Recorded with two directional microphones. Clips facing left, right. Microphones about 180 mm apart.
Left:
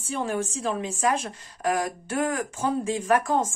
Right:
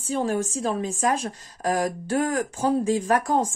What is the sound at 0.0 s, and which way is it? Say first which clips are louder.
A woman's voice: right 3 dB; 35° right (ahead or behind).